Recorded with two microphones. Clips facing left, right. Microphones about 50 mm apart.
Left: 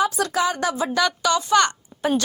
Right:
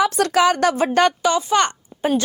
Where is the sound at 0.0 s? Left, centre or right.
Right.